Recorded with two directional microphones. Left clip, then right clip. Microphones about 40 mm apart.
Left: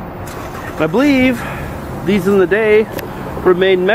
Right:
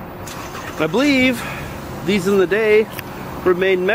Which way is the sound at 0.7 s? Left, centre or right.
Right.